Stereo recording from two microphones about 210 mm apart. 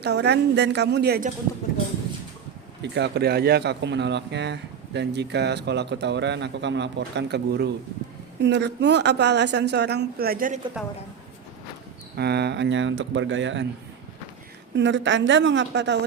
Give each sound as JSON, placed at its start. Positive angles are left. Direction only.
{"t": 0.0, "sound": "a woman's voice", "side_deg": -50}
{"t": 2.8, "sound": "a woman's voice", "side_deg": -55}
{"t": 12.1, "sound": "speech", "side_deg": -50}
{"t": 14.8, "sound": "speech", "side_deg": -60}